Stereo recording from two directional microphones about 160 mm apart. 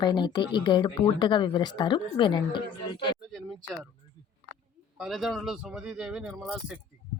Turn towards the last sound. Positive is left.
turn(degrees=0)  # may be behind; listen again after turning